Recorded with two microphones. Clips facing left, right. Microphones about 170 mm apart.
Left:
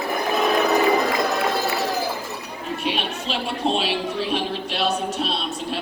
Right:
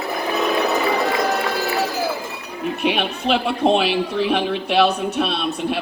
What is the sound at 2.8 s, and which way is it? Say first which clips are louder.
A woman's voice: right 6 dB; 60° right (ahead or behind).